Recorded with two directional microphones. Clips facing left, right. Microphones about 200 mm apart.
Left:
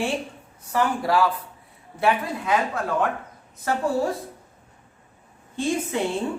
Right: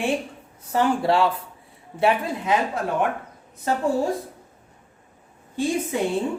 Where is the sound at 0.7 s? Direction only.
25° right (ahead or behind).